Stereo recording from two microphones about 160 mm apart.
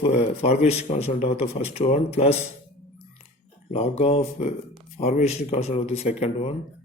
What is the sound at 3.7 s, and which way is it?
A man's voice, 40° left (ahead or behind).